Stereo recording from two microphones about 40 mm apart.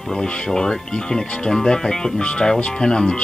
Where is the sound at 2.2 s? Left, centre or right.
Left.